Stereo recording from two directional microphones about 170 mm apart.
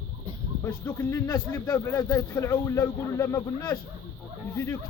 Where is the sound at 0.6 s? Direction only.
15° left (ahead or behind).